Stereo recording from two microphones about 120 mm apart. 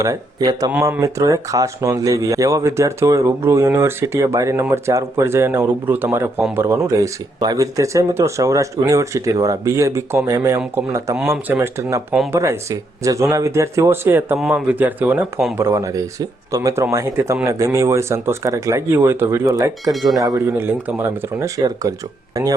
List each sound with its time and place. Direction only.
0.0 s speech: 30° right (ahead or behind)
11.2 s a man's voice: 10° right (ahead or behind)
15.5 s speech: 25° right (ahead or behind)
19.9 s speech: centre (ahead or behind)
20.1 s speech: 30° right (ahead or behind)
20.6 s speech: 15° right (ahead or behind)